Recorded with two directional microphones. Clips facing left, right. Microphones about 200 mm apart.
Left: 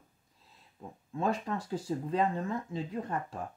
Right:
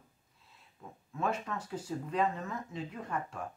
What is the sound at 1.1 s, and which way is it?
Speech, 30° left (ahead or behind).